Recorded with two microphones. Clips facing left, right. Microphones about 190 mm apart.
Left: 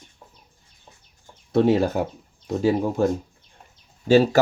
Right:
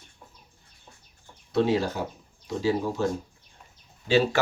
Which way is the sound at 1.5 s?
55° left (ahead or behind).